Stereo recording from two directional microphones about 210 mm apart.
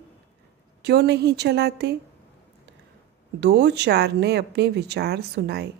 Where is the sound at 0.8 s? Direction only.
50° right (ahead or behind).